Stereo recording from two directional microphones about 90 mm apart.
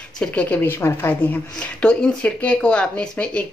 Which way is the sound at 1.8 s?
10° left (ahead or behind).